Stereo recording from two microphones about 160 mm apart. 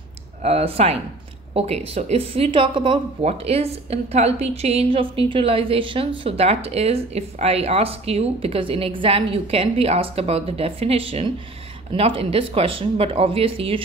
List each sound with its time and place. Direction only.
0.4 s speech: 40° right (ahead or behind)